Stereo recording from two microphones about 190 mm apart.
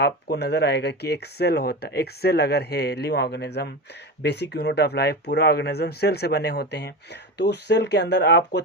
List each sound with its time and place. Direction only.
0.0 s speech: 60° left (ahead or behind)